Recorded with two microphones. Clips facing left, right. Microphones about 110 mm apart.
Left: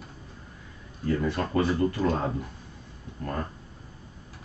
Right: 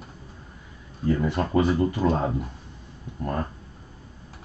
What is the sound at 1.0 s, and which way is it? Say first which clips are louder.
Speech: right 3 dB; 20° right (ahead or behind).